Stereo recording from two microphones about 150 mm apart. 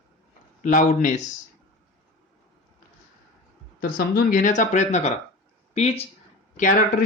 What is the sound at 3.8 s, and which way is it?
Speech, 80° left.